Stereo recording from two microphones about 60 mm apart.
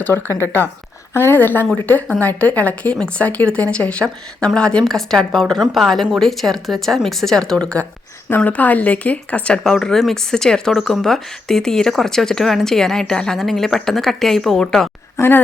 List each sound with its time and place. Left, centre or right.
1.1 s a woman's voice: left; by 7.9 s centre
8.4 s speech: left
9.6 s speech: centre
15.1 s a woman's voice: left